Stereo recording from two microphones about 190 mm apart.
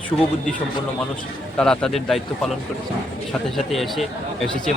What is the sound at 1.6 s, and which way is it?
Speech, 5° left (ahead or behind).